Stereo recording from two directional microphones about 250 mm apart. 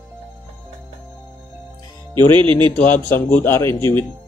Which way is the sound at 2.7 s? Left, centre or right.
Centre.